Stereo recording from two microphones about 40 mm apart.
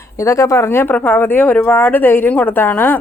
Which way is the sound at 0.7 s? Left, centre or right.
Left.